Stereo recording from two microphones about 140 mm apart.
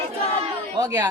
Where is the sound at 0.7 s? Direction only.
25° right (ahead or behind).